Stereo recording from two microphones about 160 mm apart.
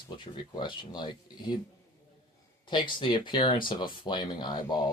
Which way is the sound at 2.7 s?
30° left (ahead or behind).